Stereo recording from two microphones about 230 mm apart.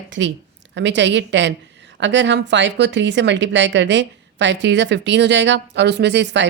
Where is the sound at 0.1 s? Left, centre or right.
Right.